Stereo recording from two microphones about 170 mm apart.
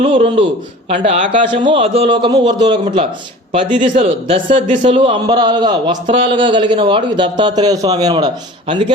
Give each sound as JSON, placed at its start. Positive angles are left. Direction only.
{"t": 0.0, "sound": "a man's voice", "side_deg": -35}
{"t": 4.6, "sound": "a man's voice", "side_deg": -50}
{"t": 4.9, "sound": "a man's voice", "side_deg": -25}